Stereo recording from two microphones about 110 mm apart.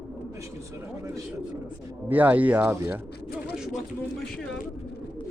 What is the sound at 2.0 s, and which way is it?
Speech, 15° right (ahead or behind).